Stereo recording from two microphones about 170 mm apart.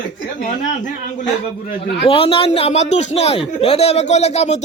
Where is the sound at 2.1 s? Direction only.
30° left (ahead or behind).